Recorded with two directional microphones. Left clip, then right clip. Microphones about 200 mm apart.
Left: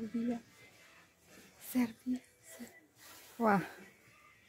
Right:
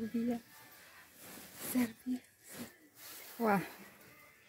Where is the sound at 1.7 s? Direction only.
5° left (ahead or behind).